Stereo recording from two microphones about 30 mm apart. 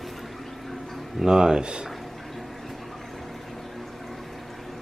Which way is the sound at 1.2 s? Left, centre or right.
Right.